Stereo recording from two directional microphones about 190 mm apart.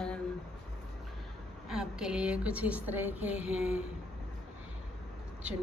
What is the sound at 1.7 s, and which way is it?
A woman's voice, 5° right (ahead or behind).